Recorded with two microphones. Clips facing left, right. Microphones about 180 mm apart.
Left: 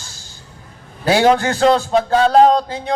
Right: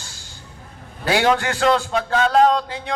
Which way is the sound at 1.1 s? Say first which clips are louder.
Left 5 dB; 35° left (ahead or behind).